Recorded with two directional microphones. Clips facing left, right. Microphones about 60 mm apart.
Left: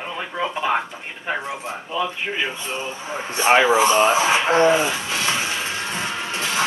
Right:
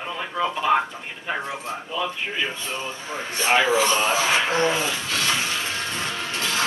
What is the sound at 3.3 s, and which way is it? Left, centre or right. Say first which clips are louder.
Speech: left 4 dB; left.